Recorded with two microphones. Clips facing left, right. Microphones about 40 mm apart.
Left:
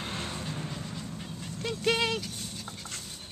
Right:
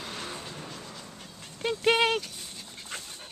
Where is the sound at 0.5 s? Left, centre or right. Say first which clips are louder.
Left 3 dB; centre.